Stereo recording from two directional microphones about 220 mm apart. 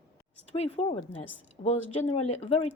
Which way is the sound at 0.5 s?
30° left (ahead or behind).